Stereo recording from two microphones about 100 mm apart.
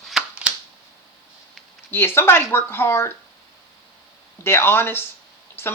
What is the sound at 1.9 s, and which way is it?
Speech, 25° left (ahead or behind).